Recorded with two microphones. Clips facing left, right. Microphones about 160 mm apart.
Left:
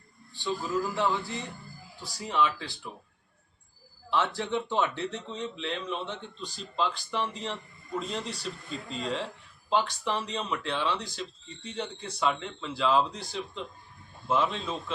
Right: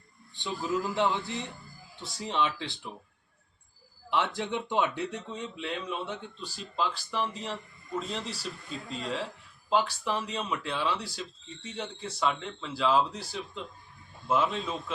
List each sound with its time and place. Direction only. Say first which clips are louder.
0.3 s speech: left 1 dB; 20° right (ahead or behind)
4.1 s speech: left 1 dB; 15° right (ahead or behind)